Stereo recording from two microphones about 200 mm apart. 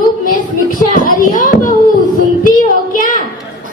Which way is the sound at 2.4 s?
40° left (ahead or behind).